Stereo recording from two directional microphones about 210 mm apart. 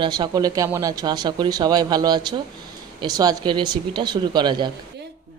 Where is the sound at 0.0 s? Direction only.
20° right (ahead or behind).